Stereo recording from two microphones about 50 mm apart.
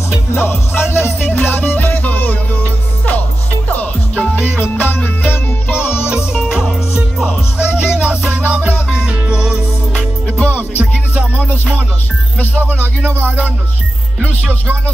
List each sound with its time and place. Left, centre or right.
0.3 s music: left
4.6 s music: left
6.0 s music: right
7.5 s music: right
9.9 s music: left
10.5 s music: right
12.8 s music: right